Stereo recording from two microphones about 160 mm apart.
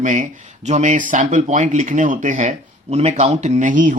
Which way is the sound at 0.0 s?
55° right (ahead or behind).